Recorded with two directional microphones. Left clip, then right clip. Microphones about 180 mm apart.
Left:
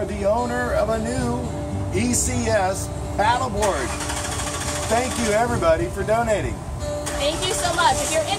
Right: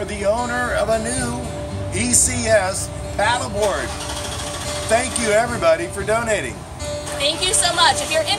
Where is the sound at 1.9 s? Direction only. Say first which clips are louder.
Right 3 dB; 15° right (ahead or behind).